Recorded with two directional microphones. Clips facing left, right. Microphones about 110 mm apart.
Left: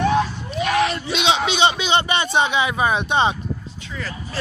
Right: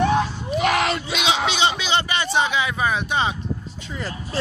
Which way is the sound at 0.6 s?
75° right (ahead or behind).